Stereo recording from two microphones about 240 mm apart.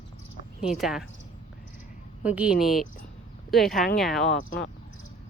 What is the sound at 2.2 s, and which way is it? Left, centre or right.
Speech, centre.